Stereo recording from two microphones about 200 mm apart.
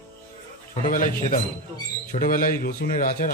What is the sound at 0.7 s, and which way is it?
A man's voice, 40° left (ahead or behind).